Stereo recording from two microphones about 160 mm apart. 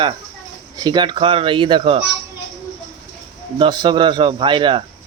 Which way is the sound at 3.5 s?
30° right (ahead or behind).